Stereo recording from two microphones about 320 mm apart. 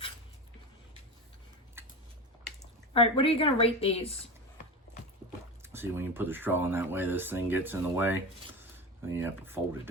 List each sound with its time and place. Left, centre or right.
2.9 s speech: centre
5.7 s speech: centre